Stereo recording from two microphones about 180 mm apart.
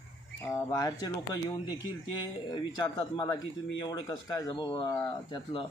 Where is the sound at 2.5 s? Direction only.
25° left (ahead or behind).